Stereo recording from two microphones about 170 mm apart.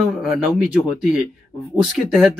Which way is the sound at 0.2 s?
5° right (ahead or behind).